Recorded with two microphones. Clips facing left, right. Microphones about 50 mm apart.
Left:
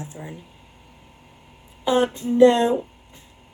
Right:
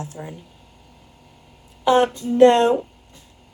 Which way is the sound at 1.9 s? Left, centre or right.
Right.